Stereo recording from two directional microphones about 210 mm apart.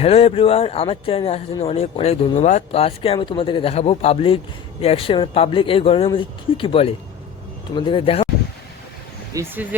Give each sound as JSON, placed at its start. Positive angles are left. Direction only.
{"t": 0.0, "sound": "speech", "side_deg": 30}
{"t": 9.3, "sound": "speech", "side_deg": -15}